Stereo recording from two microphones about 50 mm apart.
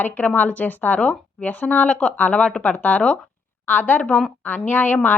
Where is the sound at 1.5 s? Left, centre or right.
Left.